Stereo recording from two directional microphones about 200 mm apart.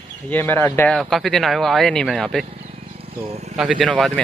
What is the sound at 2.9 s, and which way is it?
Insect, 30° right (ahead or behind).